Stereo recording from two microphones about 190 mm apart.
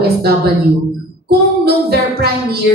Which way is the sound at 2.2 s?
55° right (ahead or behind).